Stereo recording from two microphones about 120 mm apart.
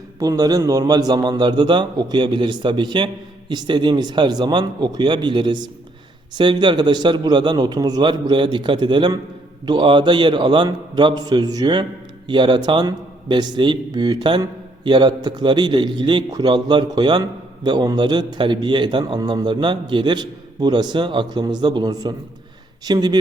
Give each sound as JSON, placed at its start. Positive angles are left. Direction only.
{"t": 0.2, "sound": "a man's voice", "side_deg": -30}